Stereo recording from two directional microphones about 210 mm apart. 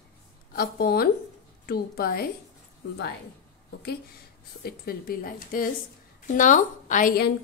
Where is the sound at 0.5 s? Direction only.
45° left (ahead or behind).